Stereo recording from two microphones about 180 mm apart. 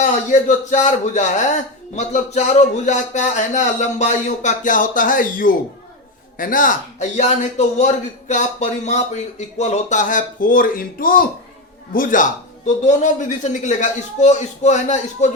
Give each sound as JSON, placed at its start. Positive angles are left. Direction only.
{"t": 0.0, "sound": "a man's voice", "side_deg": 45}